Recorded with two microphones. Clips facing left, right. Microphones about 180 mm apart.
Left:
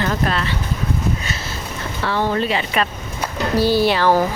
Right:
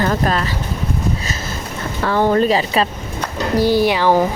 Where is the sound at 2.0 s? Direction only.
45° right (ahead or behind).